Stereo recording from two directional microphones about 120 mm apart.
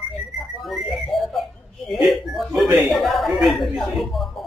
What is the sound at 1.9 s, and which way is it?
Speech, centre (ahead or behind).